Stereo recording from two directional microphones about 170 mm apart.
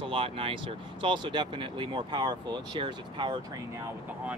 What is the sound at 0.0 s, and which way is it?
Speech, 30° right (ahead or behind).